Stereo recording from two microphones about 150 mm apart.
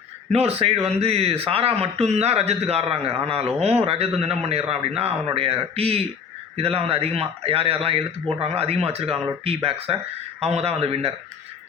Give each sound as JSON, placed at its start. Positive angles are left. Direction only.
{"t": 0.3, "sound": "a man's voice", "side_deg": -45}